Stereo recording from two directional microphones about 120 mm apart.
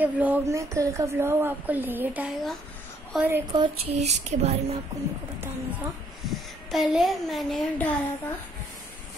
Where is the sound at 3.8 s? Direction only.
65° right (ahead or behind).